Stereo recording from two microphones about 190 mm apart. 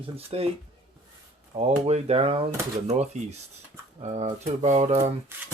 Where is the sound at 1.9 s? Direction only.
30° right (ahead or behind).